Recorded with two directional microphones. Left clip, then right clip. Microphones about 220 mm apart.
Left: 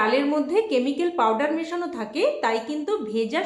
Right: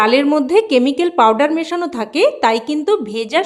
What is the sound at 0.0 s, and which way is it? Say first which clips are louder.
A woman's voice: right 8 dB; 45° right (ahead or behind).